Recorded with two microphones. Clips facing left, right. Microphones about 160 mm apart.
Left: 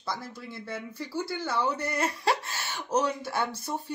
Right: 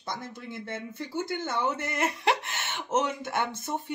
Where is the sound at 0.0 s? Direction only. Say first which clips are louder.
Left 1 dB; 20° right (ahead or behind).